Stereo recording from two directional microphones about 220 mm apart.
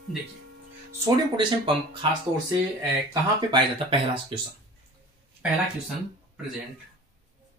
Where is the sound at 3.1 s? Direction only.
20° right (ahead or behind).